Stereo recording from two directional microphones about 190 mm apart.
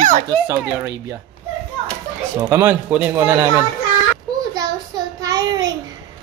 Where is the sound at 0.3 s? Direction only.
15° right (ahead or behind).